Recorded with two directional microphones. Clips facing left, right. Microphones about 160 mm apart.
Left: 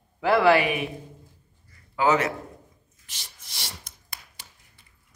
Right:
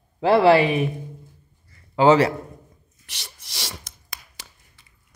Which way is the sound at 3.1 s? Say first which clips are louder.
Right 4 dB; 70° right (ahead or behind).